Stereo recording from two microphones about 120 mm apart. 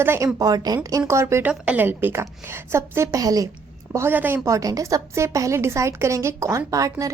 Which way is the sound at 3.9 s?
15° right (ahead or behind).